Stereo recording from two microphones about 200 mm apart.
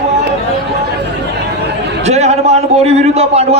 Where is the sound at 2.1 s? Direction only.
35° right (ahead or behind).